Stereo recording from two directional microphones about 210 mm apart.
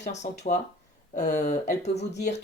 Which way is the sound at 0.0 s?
35° left (ahead or behind).